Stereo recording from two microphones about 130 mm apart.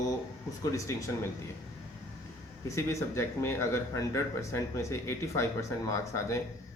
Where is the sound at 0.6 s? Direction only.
25° left (ahead or behind).